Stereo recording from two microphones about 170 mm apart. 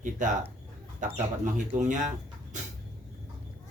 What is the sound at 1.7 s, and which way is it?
Speech, 50° right (ahead or behind).